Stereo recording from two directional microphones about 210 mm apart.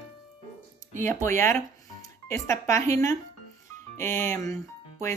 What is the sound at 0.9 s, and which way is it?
Speech, 10° left (ahead or behind).